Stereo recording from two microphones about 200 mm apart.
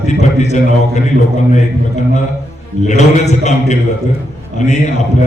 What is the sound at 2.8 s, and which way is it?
Speech, 35° left (ahead or behind).